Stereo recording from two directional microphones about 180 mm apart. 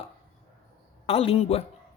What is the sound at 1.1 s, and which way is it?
Speech, 35° left (ahead or behind).